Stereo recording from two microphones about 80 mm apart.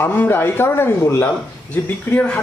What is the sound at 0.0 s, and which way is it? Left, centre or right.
A woman's voice, left.